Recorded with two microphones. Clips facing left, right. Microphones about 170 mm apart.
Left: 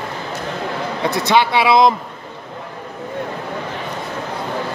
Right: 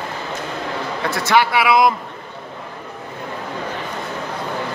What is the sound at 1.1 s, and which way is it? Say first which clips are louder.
Speech: left 1 dB; 20° left (ahead or behind).